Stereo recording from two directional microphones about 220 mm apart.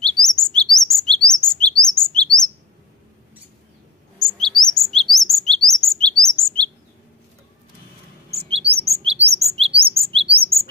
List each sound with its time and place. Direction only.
0.0 s chirp: 5° left (ahead or behind)
4.2 s chirp: centre (ahead or behind)
8.4 s chirp: 25° right (ahead or behind)
8.8 s bird: 25° right (ahead or behind)
9.4 s chirp: 30° right (ahead or behind)
9.9 s bird: 25° right (ahead or behind)